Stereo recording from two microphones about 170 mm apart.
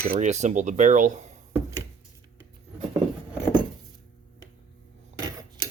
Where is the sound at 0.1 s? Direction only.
45° right (ahead or behind).